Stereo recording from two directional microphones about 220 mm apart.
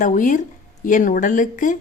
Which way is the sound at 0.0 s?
35° left (ahead or behind).